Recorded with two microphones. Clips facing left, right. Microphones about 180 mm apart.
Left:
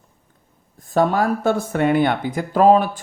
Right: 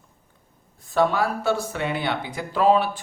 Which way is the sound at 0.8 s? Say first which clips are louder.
Left 3 dB; 45° left (ahead or behind).